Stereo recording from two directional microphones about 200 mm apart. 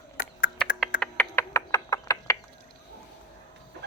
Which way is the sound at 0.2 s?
45° left (ahead or behind).